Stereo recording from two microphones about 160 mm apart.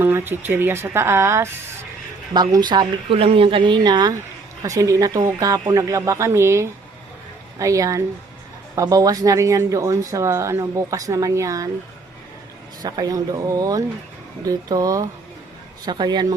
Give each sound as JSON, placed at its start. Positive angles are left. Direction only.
{"t": 0.0, "sound": "speech", "side_deg": -15}
{"t": 12.8, "sound": "speech", "side_deg": -25}